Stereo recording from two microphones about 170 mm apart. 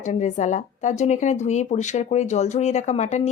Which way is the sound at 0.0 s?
45° left (ahead or behind).